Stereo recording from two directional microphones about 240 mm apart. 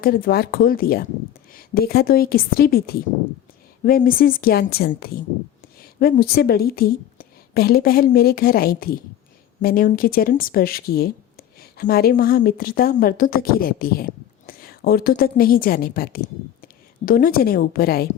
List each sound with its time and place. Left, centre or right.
0.0 s a woman's voice: left